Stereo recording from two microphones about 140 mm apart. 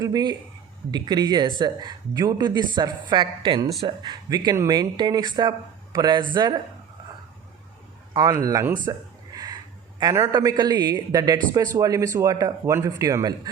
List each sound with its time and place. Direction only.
0.0 s speech: 30° right (ahead or behind)
8.1 s speech: 25° right (ahead or behind)
8.8 s a sound: 30° right (ahead or behind)
10.3 s speech: 30° right (ahead or behind)